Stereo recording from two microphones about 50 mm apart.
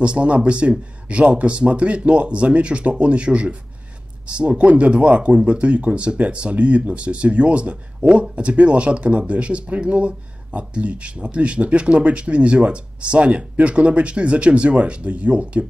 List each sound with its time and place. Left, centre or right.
0.0 s speech: right